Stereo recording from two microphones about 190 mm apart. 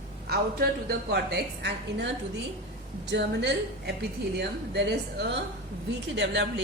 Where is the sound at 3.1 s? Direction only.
65° right (ahead or behind).